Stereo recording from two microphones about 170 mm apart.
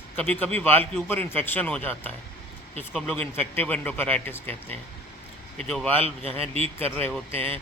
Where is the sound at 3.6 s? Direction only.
10° left (ahead or behind).